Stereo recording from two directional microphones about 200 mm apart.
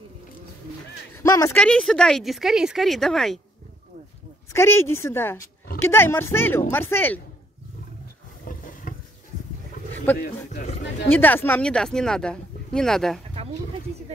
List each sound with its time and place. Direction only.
1.1 s speech: 15° left (ahead or behind)
1.6 s speech: 5° left (ahead or behind)
4.5 s a woman's voice: 10° left (ahead or behind)
8.5 s a sound: 40° left (ahead or behind)
10.1 s a woman's voice: 10° left (ahead or behind)
10.5 s speech: 40° left (ahead or behind)
11.1 s speech: 10° left (ahead or behind)